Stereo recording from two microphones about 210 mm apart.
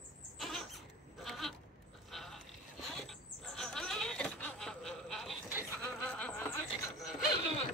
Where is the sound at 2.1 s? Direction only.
Centre (ahead or behind).